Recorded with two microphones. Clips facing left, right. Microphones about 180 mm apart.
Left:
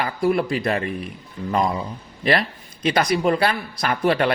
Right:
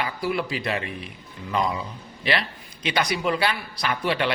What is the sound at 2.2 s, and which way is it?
A woman's voice, 45° left (ahead or behind).